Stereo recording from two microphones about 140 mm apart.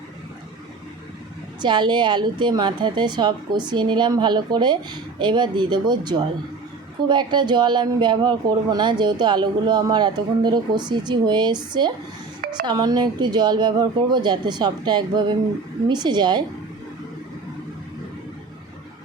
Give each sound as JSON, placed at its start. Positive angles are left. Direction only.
{"t": 1.6, "sound": "speech", "side_deg": -35}